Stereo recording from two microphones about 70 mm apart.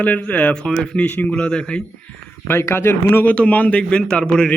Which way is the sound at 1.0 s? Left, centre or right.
Left.